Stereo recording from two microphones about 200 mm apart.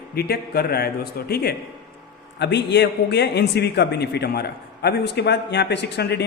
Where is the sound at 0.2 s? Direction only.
50° left (ahead or behind).